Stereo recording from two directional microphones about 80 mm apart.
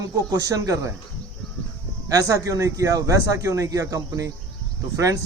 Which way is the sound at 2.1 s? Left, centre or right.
Right.